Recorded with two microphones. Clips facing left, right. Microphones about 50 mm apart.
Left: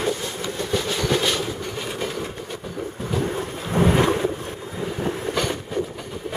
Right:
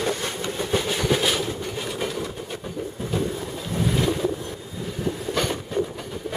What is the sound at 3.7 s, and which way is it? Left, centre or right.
Boat, left.